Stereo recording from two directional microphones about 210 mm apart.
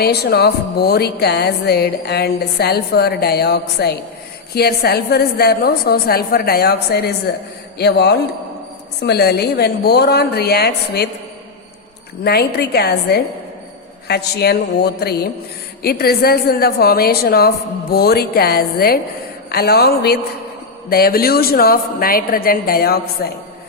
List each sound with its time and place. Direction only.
0.0 s music: 50° left (ahead or behind)
12.2 s music: 50° left (ahead or behind)